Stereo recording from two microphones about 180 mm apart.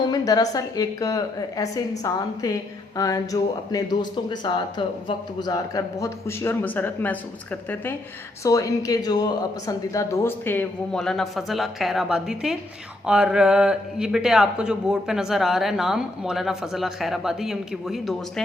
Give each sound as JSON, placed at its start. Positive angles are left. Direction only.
{"t": 0.0, "sound": "a woman's voice", "side_deg": 20}